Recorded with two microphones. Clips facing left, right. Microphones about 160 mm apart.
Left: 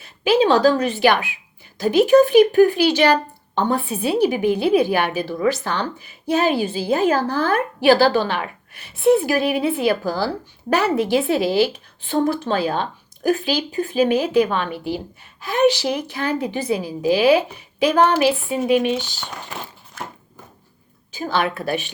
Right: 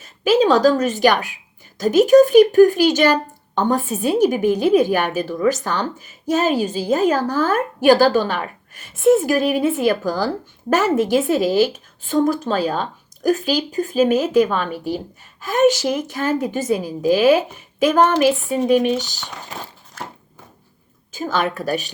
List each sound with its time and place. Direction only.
0.0 s a woman's voice: 40° right (ahead or behind)
21.1 s a woman's voice: 45° right (ahead or behind)